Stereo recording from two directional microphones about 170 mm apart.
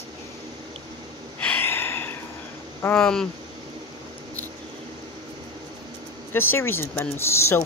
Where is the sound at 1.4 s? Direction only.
10° left (ahead or behind).